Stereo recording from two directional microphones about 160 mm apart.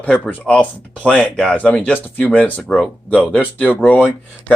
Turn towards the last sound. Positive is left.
turn(degrees=10)  # may be behind; listen again after turning